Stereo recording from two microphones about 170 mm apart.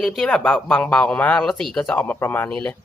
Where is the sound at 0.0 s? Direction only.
Centre (ahead or behind).